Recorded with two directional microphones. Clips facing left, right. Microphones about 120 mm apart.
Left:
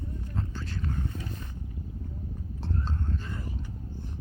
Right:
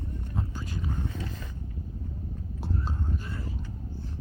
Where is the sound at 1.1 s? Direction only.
90° right.